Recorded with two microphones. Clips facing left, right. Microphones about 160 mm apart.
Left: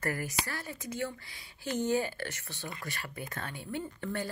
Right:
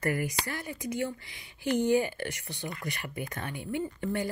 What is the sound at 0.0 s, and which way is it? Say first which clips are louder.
Speech: right 4 dB; 15° right (ahead or behind).